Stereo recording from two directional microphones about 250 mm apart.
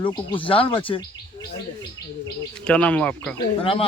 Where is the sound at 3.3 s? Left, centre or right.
Left.